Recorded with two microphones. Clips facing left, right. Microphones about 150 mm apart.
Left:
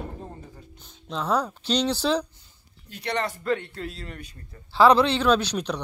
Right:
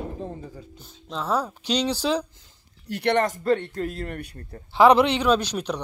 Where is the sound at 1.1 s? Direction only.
5° right (ahead or behind).